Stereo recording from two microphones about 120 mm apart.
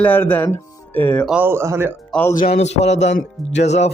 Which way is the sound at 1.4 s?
20° right (ahead or behind).